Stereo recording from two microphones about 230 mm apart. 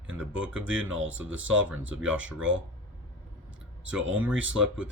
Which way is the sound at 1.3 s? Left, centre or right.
Right.